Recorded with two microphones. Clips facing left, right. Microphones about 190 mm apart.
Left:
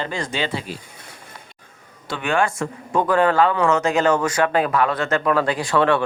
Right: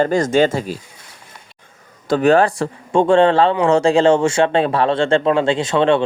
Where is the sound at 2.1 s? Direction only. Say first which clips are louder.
Right 8 dB; 40° right (ahead or behind).